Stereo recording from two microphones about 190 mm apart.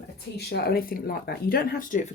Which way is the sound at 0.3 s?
60° left (ahead or behind).